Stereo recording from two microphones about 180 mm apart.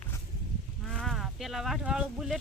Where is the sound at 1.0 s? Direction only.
Centre (ahead or behind).